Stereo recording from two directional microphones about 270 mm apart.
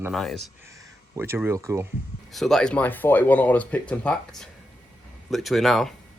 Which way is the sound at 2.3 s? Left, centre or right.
Centre.